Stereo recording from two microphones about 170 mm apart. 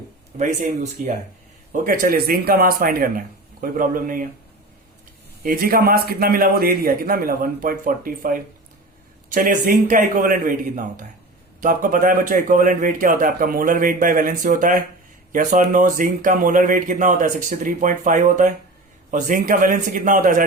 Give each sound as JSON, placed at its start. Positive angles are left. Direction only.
{"t": 0.3, "sound": "a man's voice", "side_deg": -45}
{"t": 5.4, "sound": "a man's voice", "side_deg": -60}